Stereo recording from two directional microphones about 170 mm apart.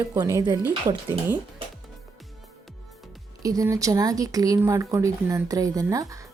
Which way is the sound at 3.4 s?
20° right (ahead or behind).